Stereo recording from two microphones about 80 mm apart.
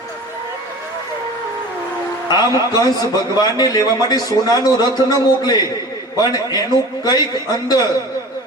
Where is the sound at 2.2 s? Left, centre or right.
Left.